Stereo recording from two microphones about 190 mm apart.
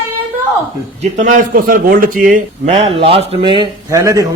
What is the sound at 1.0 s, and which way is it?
Speech, 40° right (ahead or behind).